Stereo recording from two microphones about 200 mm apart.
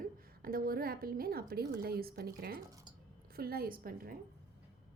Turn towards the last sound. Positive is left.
turn(degrees=-45)  # may be behind; listen again after turning